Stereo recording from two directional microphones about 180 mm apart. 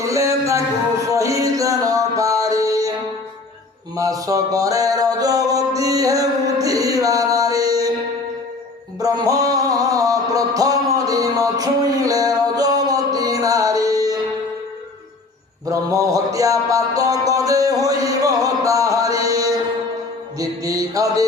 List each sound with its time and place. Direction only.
0.0 s a sound: 15° right (ahead or behind)
1.1 s music: 20° right (ahead or behind)
3.9 s music: 20° right (ahead or behind)
9.0 s music: 20° right (ahead or behind)
15.6 s a sound: 20° right (ahead or behind)
20.4 s music: 20° right (ahead or behind)